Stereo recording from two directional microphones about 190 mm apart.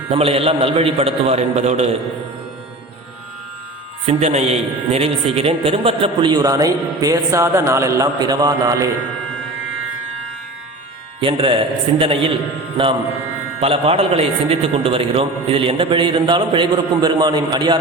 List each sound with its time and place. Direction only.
0.1 s a man's voice: 30° right (ahead or behind)
4.0 s a man's voice: 35° right (ahead or behind); by 8.9 s 20° right (ahead or behind)
11.2 s a man's voice: 25° right (ahead or behind)
13.6 s a man's voice: 30° right (ahead or behind)